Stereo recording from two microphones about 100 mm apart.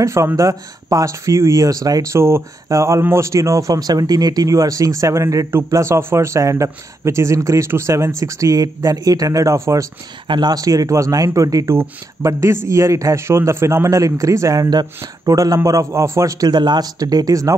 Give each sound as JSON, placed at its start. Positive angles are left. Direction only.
{"t": 0.0, "sound": "speech", "side_deg": -30}
{"t": 10.2, "sound": "speech", "side_deg": -50}